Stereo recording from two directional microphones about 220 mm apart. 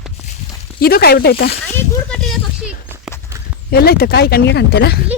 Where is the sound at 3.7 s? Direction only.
45° left (ahead or behind).